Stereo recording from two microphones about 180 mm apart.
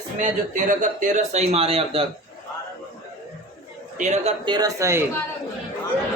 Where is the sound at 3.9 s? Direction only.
40° right (ahead or behind).